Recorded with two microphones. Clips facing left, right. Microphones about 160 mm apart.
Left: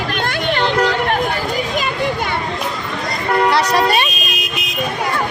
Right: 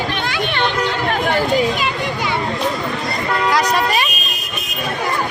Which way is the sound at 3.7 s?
30° left (ahead or behind).